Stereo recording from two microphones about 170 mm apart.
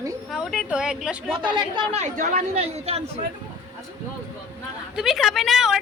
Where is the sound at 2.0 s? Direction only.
45° right (ahead or behind).